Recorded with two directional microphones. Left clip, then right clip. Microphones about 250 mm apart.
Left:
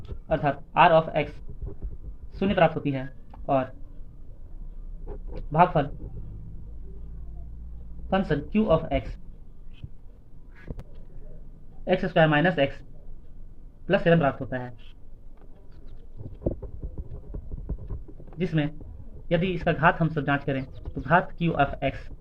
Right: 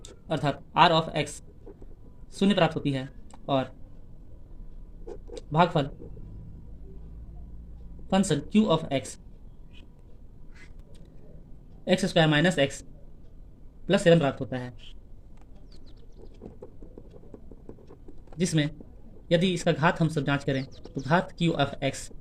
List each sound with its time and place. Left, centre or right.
0.0 s speech: right
2.3 s speech: right
5.0 s a sound: right
8.1 s speech: right
11.9 s speech: right
13.8 s speech: right
18.3 s speech: right